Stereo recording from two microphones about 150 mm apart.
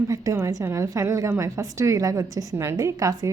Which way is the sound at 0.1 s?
20° right (ahead or behind).